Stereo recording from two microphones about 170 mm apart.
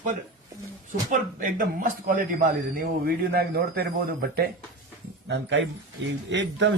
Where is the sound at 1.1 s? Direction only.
55° right (ahead or behind).